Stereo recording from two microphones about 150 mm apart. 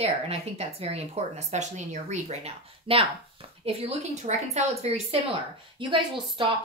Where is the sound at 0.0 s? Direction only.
45° right (ahead or behind).